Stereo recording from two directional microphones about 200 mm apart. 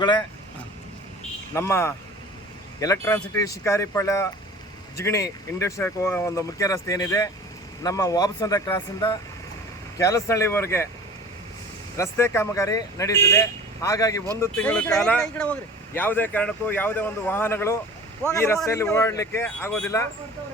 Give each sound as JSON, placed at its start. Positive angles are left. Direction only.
{"t": 0.0, "sound": "speech", "side_deg": 20}
{"t": 1.5, "sound": "speech", "side_deg": 15}
{"t": 11.9, "sound": "speech", "side_deg": 15}